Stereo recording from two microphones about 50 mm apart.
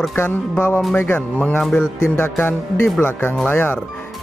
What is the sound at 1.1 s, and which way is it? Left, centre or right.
Speech, left.